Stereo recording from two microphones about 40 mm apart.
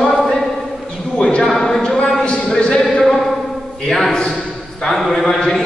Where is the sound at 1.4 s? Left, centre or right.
Centre.